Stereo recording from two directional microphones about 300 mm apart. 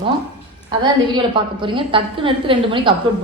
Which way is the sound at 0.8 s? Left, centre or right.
Centre.